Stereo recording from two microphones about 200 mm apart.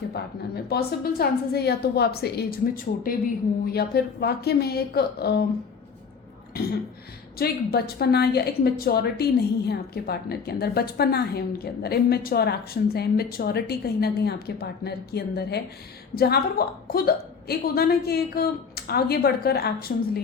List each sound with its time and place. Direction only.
0.1 s a woman's voice: 50° left (ahead or behind)
3.7 s a woman's voice: 50° left (ahead or behind)
7.3 s a woman's voice: 50° left (ahead or behind)